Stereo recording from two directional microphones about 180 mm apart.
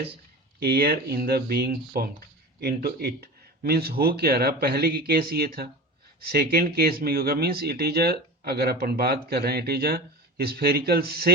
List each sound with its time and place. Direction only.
0.6 s speech: 60° right (ahead or behind)